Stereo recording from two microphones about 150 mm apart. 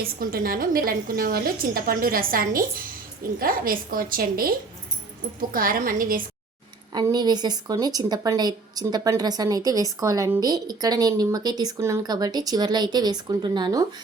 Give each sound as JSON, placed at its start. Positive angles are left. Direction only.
{"t": 0.2, "sound": "a woman's voice", "side_deg": -75}
{"t": 6.9, "sound": "speech", "side_deg": -30}